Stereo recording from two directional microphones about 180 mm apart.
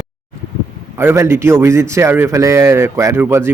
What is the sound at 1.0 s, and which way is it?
Speech, 15° right (ahead or behind).